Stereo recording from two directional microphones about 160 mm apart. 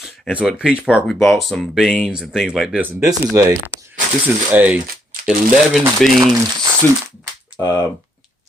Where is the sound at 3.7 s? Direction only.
90° left.